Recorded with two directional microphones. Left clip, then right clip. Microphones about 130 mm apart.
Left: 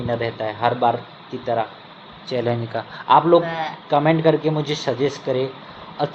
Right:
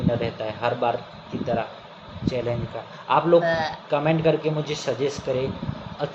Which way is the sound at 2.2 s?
85° left.